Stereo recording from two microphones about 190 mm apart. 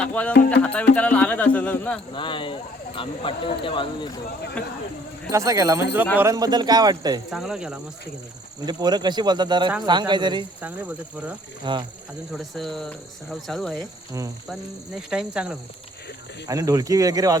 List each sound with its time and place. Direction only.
0.0 s speech: 5° left (ahead or behind)
2.1 s speech: 25° left (ahead or behind)
4.6 s speech: 5° left (ahead or behind)
5.3 s speech: 15° right (ahead or behind)
7.3 s speech: centre (ahead or behind)
8.6 s speech: 20° right (ahead or behind)
10.6 s speech: 10° right (ahead or behind)
11.6 s speech: 25° right (ahead or behind)
12.3 s speech: centre (ahead or behind)
14.9 s speech: 5° right (ahead or behind)
16.5 s speech: 20° right (ahead or behind)